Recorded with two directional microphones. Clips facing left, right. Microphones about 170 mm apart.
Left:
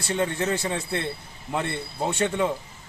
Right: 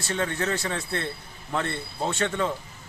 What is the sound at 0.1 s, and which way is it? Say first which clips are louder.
Speech: left 2 dB; 15° left (ahead or behind).